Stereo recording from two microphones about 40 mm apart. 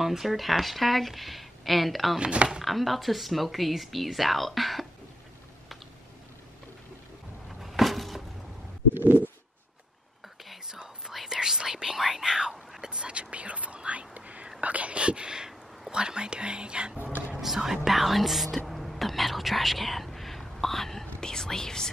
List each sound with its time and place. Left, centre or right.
0.0 s speech: centre
2.1 s speech: right
2.6 s speech: centre
7.4 s a sound: centre
8.9 s stomach rumble: right
10.7 s whispering: centre; by 14.5 s right
14.6 s a sound: right
15.9 s whispering: right
17.4 s whispering: centre